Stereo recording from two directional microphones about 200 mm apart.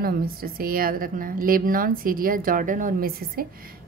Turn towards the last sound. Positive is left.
turn(degrees=-45)  # may be behind; listen again after turning